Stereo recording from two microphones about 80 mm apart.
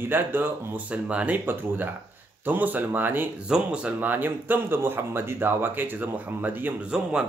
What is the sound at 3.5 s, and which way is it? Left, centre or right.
Speech, centre.